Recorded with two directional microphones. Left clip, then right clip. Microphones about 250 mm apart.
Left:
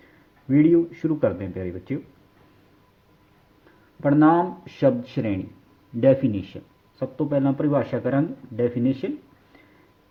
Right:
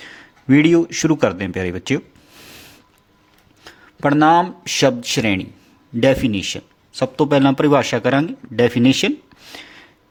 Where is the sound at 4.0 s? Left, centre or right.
Right.